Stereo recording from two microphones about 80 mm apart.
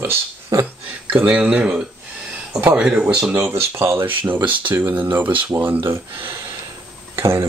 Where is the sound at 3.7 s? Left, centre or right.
Right.